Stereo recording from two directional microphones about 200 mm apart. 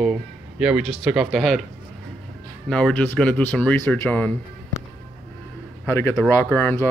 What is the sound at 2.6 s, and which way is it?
Speech, 5° left (ahead or behind).